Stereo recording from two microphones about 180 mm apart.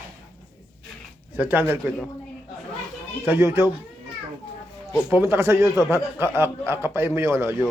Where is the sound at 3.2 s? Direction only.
15° right (ahead or behind).